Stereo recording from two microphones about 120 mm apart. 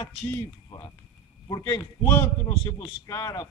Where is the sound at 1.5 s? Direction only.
30° left (ahead or behind).